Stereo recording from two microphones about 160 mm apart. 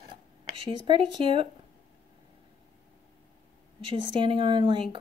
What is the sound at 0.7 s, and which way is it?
Speech, 30° right (ahead or behind).